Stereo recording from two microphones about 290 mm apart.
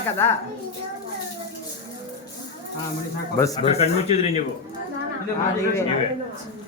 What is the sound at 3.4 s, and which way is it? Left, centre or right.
Speech, centre.